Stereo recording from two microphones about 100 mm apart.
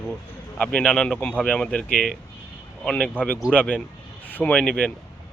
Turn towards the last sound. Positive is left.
turn(degrees=10)  # may be behind; listen again after turning